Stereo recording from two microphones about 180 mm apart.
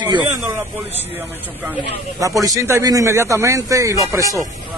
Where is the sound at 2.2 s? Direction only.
20° right (ahead or behind).